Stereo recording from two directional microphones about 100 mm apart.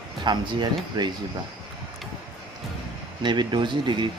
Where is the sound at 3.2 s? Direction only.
50° right (ahead or behind).